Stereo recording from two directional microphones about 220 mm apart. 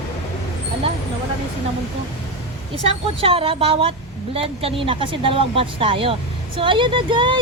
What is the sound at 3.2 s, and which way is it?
Speech, 25° right (ahead or behind).